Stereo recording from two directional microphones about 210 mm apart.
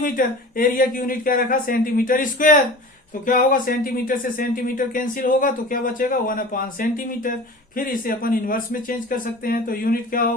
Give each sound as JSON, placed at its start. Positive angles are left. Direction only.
{"t": 0.0, "sound": "speech", "side_deg": 40}